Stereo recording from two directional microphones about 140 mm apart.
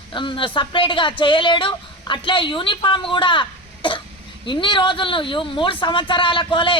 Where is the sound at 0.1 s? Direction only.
35° left (ahead or behind).